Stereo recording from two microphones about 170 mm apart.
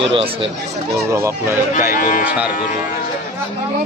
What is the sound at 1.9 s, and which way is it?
Speech, 50° left (ahead or behind).